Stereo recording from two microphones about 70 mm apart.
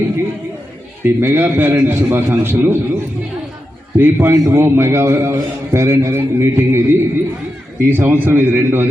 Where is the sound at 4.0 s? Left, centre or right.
Right.